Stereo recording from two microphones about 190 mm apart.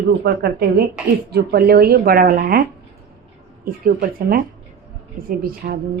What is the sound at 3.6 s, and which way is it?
Speech, 50° right (ahead or behind).